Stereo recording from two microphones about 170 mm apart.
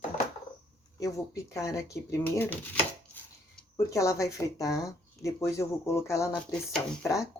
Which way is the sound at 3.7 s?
20° left (ahead or behind).